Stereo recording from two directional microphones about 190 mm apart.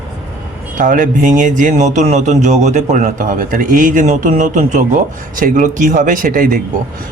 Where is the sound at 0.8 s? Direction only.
45° right (ahead or behind).